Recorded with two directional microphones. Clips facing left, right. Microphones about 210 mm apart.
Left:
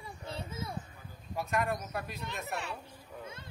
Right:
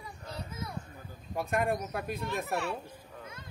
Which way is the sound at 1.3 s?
50° right (ahead or behind).